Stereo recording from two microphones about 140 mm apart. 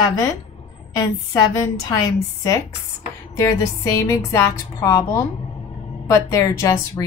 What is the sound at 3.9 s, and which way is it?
Speech, 20° left (ahead or behind).